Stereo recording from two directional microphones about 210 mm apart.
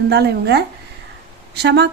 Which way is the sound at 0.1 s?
50° right (ahead or behind).